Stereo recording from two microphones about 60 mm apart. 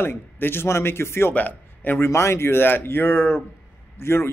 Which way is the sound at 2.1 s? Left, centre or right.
Left.